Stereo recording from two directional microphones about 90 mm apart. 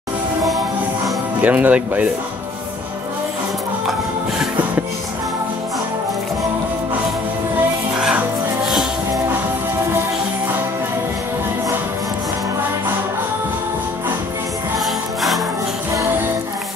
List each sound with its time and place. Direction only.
1.4 s speech: 15° right (ahead or behind)
8.0 s music: 10° right (ahead or behind)